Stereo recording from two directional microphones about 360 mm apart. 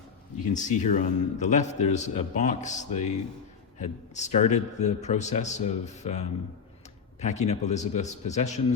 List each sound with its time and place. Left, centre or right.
0.5 s a man's voice: centre